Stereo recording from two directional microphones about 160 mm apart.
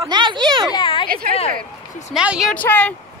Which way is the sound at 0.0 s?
30° right (ahead or behind).